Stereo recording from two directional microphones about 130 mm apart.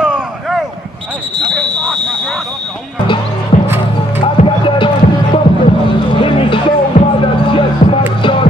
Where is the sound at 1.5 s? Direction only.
5° left (ahead or behind).